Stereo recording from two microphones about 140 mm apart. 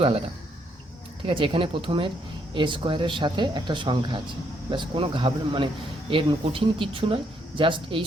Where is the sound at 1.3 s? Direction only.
40° right (ahead or behind).